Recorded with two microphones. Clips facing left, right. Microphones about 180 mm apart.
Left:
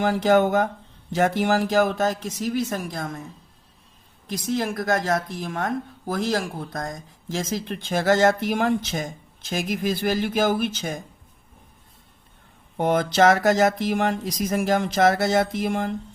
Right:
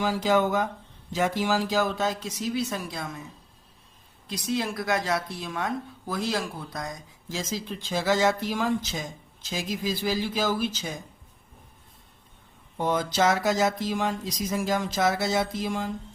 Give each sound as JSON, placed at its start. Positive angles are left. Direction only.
{"t": 0.0, "sound": "speech", "side_deg": 60}
{"t": 4.5, "sound": "speech", "side_deg": 50}
{"t": 12.7, "sound": "speech", "side_deg": 60}